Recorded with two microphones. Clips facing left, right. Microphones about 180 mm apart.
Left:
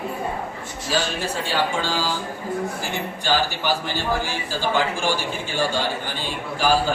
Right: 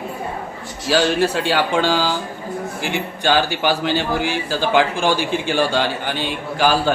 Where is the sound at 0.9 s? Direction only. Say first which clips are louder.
Right 8 dB; 80° right.